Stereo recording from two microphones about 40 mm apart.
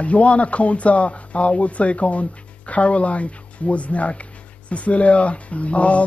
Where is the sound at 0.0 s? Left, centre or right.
Left.